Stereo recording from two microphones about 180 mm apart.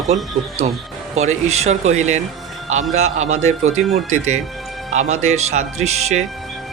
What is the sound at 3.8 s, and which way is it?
Speech, centre (ahead or behind).